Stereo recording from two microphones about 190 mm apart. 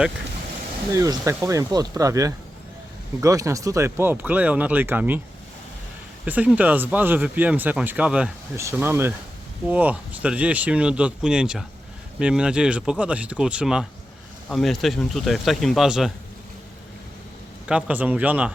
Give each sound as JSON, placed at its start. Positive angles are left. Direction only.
{"t": 0.9, "sound": "speech", "side_deg": -15}
{"t": 6.2, "sound": "speech", "side_deg": -10}
{"t": 17.7, "sound": "speech", "side_deg": -5}